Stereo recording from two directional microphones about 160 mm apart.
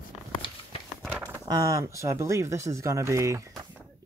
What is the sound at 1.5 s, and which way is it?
Speech, 20° right (ahead or behind).